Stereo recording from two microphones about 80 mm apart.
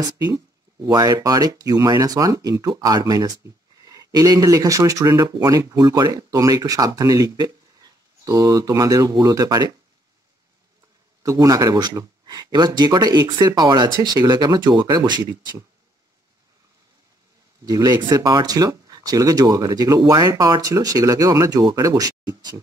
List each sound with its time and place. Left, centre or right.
0.0 s speech: right
11.2 s speech: right
17.6 s speech: right